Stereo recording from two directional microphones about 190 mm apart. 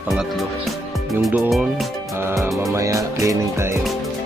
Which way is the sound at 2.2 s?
15° right (ahead or behind).